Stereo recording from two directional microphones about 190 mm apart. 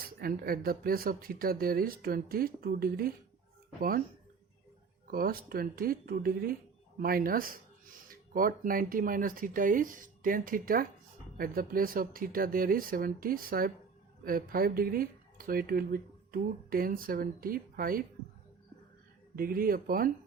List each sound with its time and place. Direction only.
0.2 s speech: 50° right (ahead or behind)
5.1 s speech: 50° right (ahead or behind)
19.4 s speech: 50° right (ahead or behind)